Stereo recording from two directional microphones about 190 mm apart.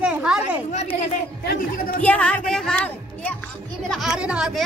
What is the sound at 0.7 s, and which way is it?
Speech, 35° left (ahead or behind).